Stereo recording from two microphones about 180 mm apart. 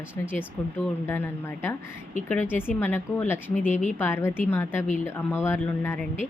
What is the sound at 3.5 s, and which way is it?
Speech, 45° left (ahead or behind).